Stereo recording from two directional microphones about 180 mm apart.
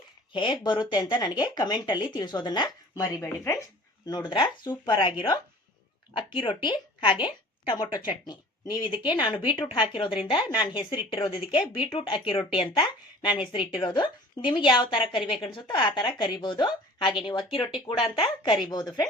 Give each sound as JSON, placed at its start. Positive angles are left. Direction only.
{"t": 0.3, "sound": "a woman's voice", "side_deg": 25}